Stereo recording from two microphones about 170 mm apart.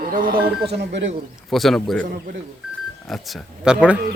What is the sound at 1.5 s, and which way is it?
Speech, centre (ahead or behind).